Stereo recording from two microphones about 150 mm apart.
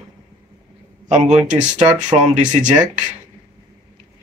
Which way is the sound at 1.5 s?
50° right (ahead or behind).